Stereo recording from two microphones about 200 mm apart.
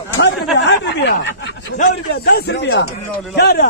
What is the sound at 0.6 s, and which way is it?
A man's voice, 60° left (ahead or behind).